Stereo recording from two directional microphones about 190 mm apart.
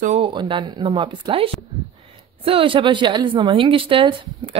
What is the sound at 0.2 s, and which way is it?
A woman's voice, 25° right (ahead or behind).